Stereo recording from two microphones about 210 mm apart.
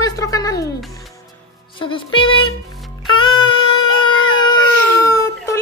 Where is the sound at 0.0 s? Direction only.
15° left (ahead or behind).